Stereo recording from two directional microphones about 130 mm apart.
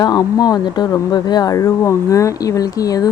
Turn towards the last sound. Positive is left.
turn(degrees=30)  # may be behind; listen again after turning